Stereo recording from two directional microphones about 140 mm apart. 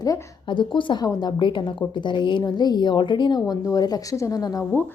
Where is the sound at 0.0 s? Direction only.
30° left (ahead or behind).